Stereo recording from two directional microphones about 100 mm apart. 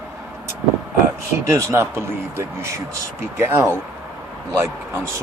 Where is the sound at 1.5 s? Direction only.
30° right (ahead or behind).